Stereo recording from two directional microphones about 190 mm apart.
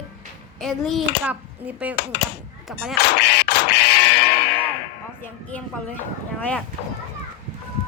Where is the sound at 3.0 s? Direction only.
60° left (ahead or behind).